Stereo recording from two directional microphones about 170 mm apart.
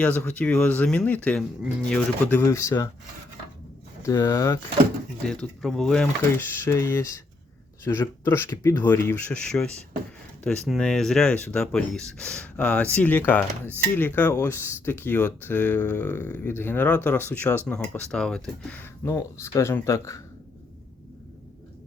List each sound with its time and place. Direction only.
0.0 s speech: 10° left (ahead or behind)
4.0 s speech: 20° left (ahead or behind)
5.2 s speech: 5° left (ahead or behind)
6.7 s speech: 15° left (ahead or behind)
19.0 s speech: 15° left (ahead or behind)